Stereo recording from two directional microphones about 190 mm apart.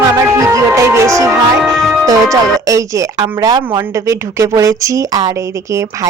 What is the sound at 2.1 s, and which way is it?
Speech, 15° right (ahead or behind).